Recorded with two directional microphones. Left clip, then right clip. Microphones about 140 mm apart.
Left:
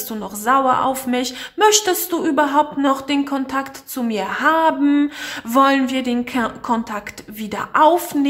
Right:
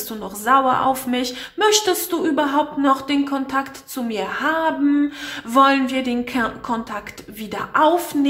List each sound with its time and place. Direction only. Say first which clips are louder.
0.1 s a woman's voice: even; 30° left (ahead or behind)